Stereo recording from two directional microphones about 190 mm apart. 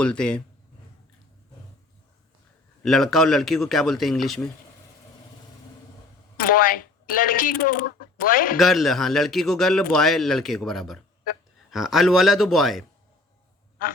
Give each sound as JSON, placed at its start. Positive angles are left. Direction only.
{"t": 0.0, "sound": "a man's voice", "side_deg": 5}
{"t": 2.8, "sound": "a man's voice", "side_deg": 0}
{"t": 6.3, "sound": "speech", "side_deg": 50}
{"t": 8.5, "sound": "a man's voice", "side_deg": 0}